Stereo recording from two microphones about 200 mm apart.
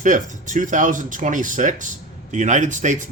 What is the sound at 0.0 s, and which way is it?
Speech, 40° right (ahead or behind).